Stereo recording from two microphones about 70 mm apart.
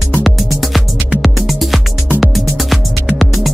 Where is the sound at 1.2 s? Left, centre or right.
Centre.